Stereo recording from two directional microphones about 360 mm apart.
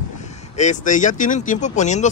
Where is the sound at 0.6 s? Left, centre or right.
Centre.